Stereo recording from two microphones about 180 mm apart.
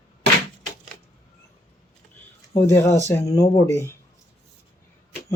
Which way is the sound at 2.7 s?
15° left (ahead or behind).